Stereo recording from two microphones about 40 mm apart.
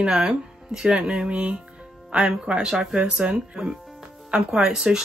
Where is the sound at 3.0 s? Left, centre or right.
Right.